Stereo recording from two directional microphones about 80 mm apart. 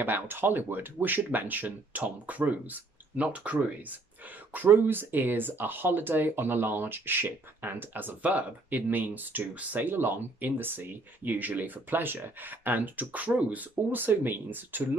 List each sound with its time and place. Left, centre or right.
0.0 s speech: right